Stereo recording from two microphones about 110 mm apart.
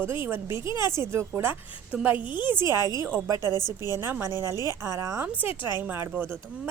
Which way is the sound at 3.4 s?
35° left (ahead or behind).